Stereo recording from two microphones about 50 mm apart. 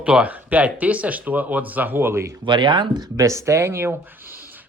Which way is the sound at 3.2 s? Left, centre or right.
Right.